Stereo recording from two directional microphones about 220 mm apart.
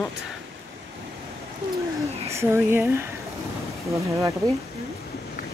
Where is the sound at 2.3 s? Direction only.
10° right (ahead or behind).